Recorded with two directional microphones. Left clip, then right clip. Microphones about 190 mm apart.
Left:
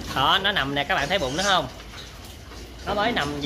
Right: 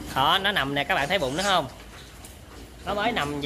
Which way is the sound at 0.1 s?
40° right (ahead or behind).